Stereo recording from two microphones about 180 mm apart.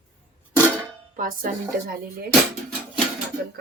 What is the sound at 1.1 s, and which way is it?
Speech, 50° right (ahead or behind).